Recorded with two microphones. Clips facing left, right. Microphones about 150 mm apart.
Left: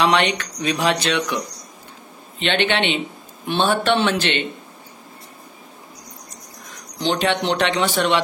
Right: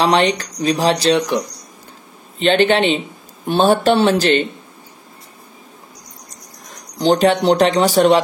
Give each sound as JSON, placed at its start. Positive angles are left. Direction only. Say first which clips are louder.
{"t": 0.0, "sound": "speech", "louder": "right 3 dB", "side_deg": -35}
{"t": 6.6, "sound": "speech", "louder": "right 6 dB", "side_deg": -40}